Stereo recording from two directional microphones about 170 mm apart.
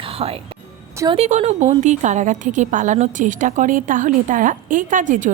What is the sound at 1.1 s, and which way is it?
A woman's voice, 40° right (ahead or behind).